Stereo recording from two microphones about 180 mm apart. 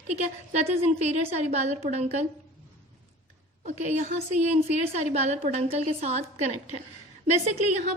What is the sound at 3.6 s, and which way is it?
A woman's voice, 40° right (ahead or behind).